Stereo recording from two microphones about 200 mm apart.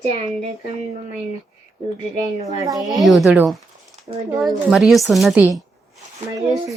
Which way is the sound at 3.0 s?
Centre (ahead or behind).